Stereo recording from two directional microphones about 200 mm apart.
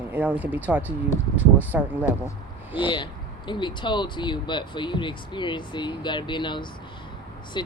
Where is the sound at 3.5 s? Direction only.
25° left (ahead or behind).